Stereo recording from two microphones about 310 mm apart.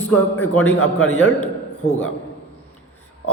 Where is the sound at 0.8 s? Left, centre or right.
Left.